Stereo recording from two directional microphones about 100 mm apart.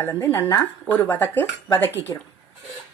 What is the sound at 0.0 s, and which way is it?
Speech, 20° left (ahead or behind).